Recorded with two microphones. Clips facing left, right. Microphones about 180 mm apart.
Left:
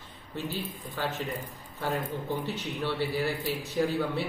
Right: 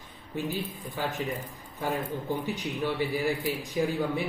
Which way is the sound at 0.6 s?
10° right (ahead or behind).